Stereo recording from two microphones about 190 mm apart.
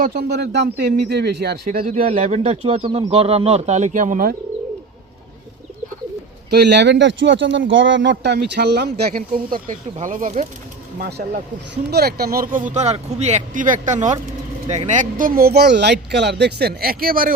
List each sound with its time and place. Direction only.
0.0 s speech: 50° right (ahead or behind)
2.0 s speech: 40° right (ahead or behind)
6.5 s speech: 60° right (ahead or behind)
11.7 s speech: 60° right (ahead or behind)